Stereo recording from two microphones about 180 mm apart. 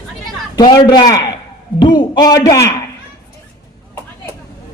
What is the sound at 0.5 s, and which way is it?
A man's voice, 25° left (ahead or behind).